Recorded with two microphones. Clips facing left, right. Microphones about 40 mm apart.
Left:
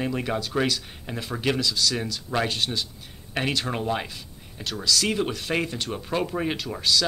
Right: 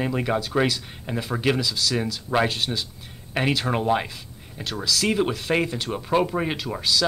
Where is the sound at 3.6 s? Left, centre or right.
Centre.